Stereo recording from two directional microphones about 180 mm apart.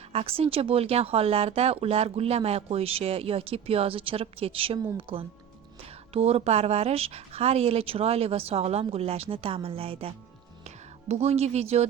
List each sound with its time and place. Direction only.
0.1 s speech: 35° right (ahead or behind)
11.1 s speech: 35° right (ahead or behind)